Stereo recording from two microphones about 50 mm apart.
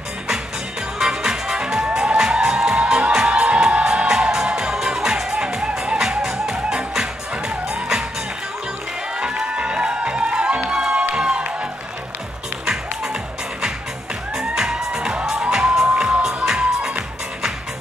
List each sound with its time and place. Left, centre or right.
0.9 s music: centre
9.1 s music: centre
12.6 s music: centre